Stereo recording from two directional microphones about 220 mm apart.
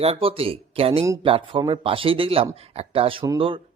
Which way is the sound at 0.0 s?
25° right (ahead or behind).